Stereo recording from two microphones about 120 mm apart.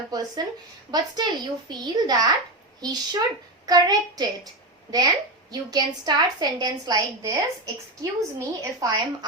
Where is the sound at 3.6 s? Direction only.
30° right (ahead or behind).